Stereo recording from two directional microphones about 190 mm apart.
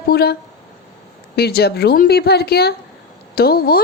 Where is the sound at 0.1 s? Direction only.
55° left (ahead or behind).